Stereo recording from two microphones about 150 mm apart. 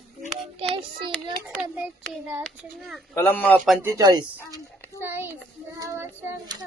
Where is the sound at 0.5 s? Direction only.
35° right (ahead or behind).